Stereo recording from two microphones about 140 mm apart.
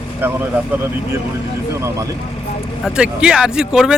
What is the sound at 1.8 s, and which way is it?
Speech, 20° right (ahead or behind).